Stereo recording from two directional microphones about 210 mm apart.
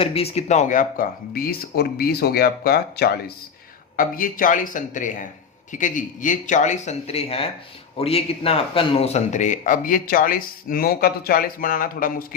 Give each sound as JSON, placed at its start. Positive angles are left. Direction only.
{"t": 0.0, "sound": "speech", "side_deg": 25}